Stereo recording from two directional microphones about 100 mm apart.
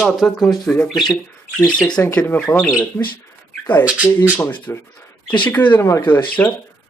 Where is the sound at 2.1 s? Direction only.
10° left (ahead or behind).